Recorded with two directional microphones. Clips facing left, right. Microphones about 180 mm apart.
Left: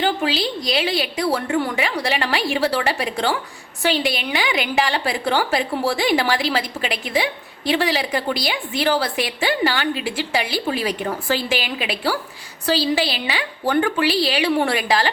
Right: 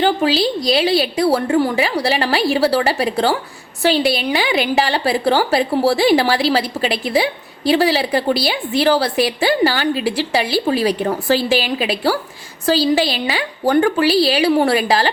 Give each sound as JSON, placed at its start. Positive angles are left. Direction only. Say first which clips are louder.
{"t": 0.0, "sound": "a woman's voice", "louder": "right 5 dB", "side_deg": -35}